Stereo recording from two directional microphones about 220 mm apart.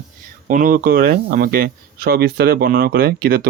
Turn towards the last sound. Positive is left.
turn(degrees=-45)  # may be behind; listen again after turning